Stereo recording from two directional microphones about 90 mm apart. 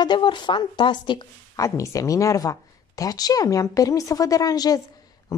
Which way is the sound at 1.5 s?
35° left (ahead or behind).